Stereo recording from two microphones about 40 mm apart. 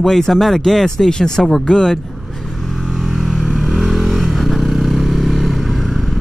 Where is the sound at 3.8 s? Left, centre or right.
Centre.